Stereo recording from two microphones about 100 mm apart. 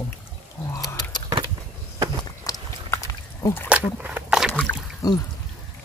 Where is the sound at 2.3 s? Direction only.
40° left (ahead or behind).